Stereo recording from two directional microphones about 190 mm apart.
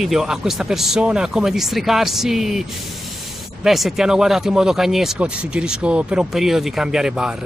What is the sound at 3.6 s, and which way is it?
Speech, centre (ahead or behind).